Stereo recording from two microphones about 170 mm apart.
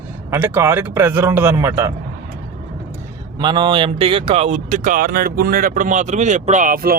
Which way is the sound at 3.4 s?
25° right (ahead or behind).